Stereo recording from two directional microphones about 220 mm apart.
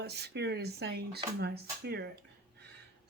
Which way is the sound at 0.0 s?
50° right (ahead or behind).